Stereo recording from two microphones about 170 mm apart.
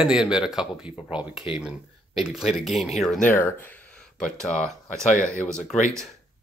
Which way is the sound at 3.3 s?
10° left (ahead or behind).